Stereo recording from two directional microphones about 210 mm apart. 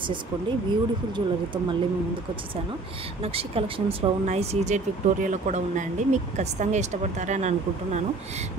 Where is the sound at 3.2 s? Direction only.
25° right (ahead or behind).